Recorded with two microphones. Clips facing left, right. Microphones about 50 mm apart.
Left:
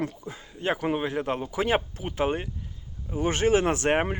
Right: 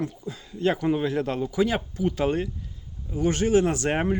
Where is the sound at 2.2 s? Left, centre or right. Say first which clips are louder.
Left 1 dB; left.